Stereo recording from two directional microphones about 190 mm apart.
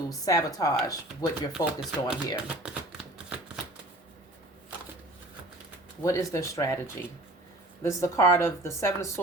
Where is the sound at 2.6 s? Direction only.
5° right (ahead or behind).